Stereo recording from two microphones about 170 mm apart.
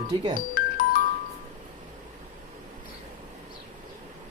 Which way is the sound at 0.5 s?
55° left (ahead or behind).